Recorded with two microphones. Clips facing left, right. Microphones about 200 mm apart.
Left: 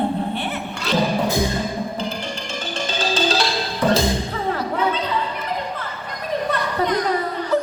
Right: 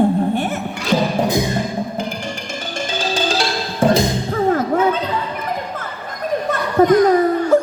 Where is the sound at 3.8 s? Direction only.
45° right (ahead or behind).